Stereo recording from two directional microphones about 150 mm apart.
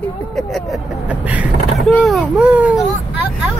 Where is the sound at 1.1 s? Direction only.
10° right (ahead or behind).